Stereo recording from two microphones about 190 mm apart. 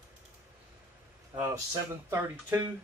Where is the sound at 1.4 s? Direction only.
15° right (ahead or behind).